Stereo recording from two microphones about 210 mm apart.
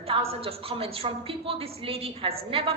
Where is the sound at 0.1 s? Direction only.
25° right (ahead or behind).